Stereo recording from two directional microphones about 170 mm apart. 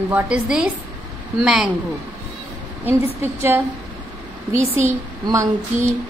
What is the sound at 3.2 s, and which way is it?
Speech, 15° right (ahead or behind).